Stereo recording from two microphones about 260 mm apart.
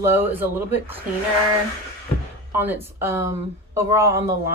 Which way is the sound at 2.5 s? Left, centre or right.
Centre.